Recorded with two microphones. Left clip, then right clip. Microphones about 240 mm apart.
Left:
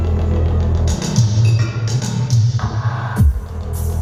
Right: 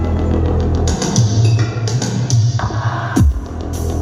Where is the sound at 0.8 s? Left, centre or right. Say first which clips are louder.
Right 4 dB; right.